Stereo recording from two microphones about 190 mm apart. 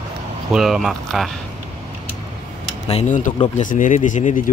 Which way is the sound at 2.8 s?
35° left (ahead or behind).